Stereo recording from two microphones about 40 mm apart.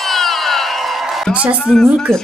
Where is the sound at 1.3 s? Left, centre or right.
Right.